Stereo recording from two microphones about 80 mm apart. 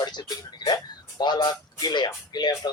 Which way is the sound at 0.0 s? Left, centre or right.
Left.